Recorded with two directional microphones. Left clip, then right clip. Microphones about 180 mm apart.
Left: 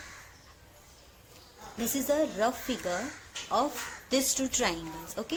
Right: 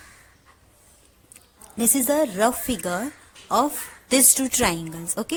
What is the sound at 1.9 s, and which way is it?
A woman's voice, 55° right (ahead or behind).